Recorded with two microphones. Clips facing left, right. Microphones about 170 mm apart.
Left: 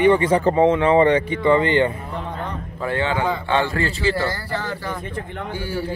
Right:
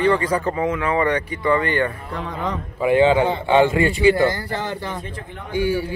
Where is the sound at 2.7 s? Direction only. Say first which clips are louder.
Right 7 dB; 15° right (ahead or behind).